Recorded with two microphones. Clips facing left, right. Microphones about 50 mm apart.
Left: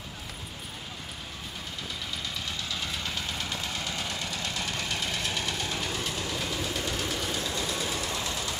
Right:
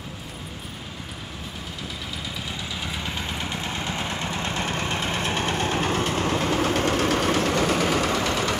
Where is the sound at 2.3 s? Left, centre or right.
Centre.